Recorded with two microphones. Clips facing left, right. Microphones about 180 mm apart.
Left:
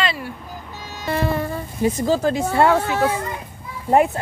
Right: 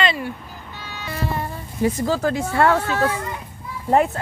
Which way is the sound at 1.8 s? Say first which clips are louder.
Left 1 dB; 20° left (ahead or behind).